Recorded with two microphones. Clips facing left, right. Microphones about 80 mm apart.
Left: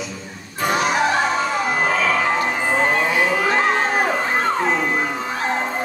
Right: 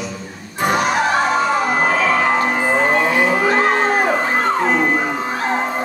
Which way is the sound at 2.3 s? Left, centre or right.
Right.